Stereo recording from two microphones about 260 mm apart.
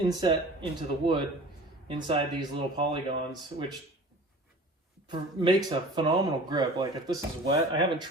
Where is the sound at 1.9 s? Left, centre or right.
Centre.